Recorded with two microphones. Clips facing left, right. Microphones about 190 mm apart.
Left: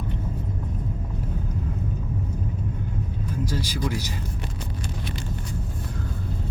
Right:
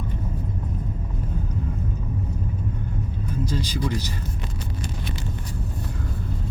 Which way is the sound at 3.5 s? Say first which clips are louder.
Right 2 dB; 10° left (ahead or behind).